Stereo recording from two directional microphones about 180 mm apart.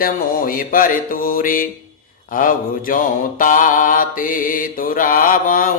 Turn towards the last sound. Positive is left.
turn(degrees=50)  # may be behind; listen again after turning